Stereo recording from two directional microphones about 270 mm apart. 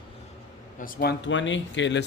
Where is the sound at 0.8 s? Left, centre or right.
Left.